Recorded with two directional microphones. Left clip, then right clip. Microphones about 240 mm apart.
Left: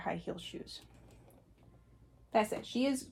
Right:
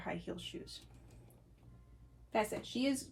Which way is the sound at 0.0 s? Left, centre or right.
Left.